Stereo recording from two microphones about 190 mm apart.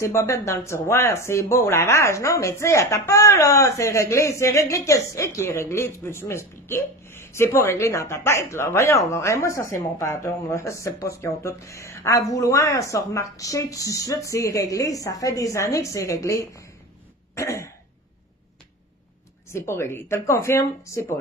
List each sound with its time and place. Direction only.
0.0 s speech: 15° left (ahead or behind)
19.5 s speech: 15° left (ahead or behind)